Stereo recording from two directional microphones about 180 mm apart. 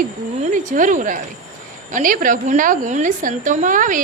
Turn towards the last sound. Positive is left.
turn(degrees=-45)  # may be behind; listen again after turning